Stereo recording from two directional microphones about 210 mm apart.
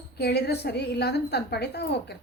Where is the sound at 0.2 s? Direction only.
50° left (ahead or behind).